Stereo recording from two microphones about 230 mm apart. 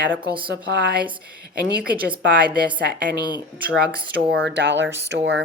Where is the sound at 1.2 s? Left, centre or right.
Right.